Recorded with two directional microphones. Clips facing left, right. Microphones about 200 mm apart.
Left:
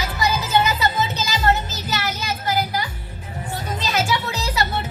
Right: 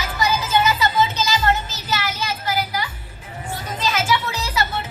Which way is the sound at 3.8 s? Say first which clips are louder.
Right 2 dB; 40° left (ahead or behind).